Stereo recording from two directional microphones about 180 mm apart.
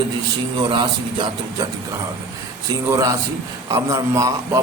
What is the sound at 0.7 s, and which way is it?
Speech, 25° right (ahead or behind).